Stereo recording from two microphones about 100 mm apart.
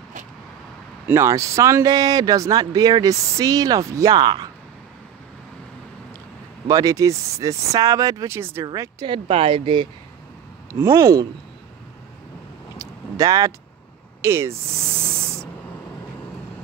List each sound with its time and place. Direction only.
1.0 s speech: 30° right (ahead or behind); by 4.5 s 45° right (ahead or behind)
6.7 s speech: 35° right (ahead or behind)
9.0 s speech: 65° right (ahead or behind)
10.7 s speech: 25° right (ahead or behind)
12.7 s vehicle: 35° right (ahead or behind)
14.2 s speech: 25° right (ahead or behind)